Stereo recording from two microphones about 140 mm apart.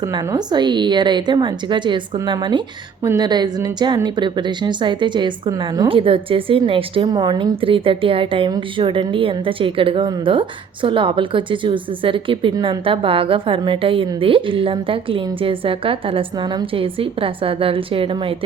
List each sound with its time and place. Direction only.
0.0 s a woman's voice: 25° right (ahead or behind)
12.5 s a woman's voice: 25° right (ahead or behind)
12.8 s a woman's voice: 40° right (ahead or behind)